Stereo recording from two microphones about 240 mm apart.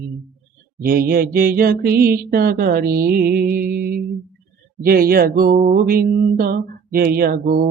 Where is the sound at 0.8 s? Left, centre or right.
Right.